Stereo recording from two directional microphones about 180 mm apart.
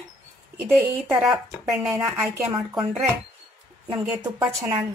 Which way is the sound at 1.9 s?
15° right (ahead or behind).